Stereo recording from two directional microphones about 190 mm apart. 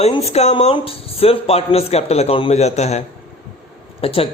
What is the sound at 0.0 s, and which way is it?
A man's voice, 35° left (ahead or behind).